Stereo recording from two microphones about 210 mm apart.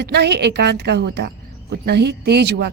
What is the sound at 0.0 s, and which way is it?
Speech, 50° right (ahead or behind).